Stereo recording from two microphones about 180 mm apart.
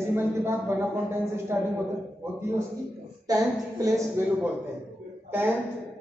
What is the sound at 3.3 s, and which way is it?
A man's voice, 20° right (ahead or behind).